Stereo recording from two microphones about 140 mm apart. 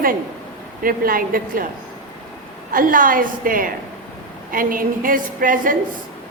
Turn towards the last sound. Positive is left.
turn(degrees=-80)